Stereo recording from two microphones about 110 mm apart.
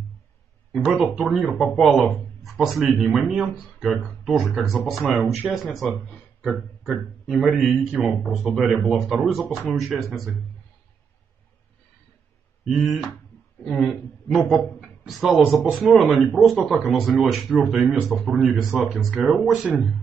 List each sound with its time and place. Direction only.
0.7 s speech: 5° right (ahead or behind)
12.6 s speech: centre (ahead or behind)
16.1 s speech: 15° right (ahead or behind)
16.3 s speech: centre (ahead or behind)